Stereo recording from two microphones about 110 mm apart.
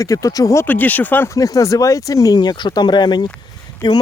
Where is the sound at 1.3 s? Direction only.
30° left (ahead or behind).